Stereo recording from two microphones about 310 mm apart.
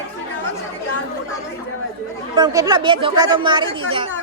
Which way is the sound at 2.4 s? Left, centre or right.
Centre.